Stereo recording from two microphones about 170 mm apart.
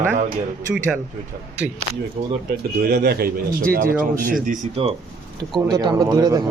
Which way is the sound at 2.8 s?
70° right (ahead or behind).